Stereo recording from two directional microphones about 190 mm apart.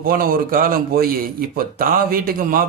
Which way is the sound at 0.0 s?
50° right (ahead or behind).